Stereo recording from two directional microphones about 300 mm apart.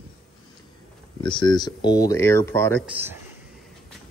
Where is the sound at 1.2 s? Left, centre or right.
Centre.